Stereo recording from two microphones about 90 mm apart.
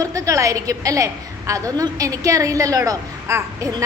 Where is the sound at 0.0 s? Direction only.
40° right (ahead or behind).